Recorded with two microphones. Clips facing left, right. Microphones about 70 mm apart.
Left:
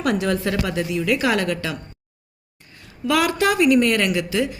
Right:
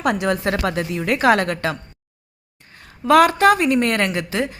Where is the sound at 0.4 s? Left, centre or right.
Right.